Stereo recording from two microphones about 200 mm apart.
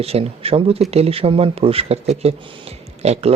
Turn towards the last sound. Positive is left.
turn(degrees=-30)  # may be behind; listen again after turning